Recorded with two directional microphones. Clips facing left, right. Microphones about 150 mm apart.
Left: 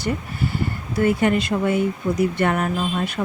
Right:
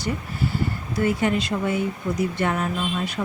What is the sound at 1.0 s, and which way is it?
Speech, 55° left (ahead or behind).